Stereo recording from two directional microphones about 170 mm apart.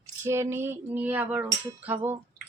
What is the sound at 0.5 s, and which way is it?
Music, 15° right (ahead or behind).